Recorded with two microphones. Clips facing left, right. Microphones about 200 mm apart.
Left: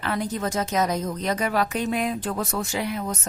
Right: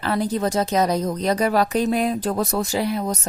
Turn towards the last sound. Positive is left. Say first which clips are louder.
# right 5 dB
turn(degrees=-35)  # may be behind; listen again after turning